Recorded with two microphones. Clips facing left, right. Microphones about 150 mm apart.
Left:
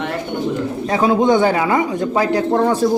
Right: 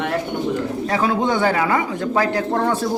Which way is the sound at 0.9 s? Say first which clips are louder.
Left 6 dB; 15° left (ahead or behind).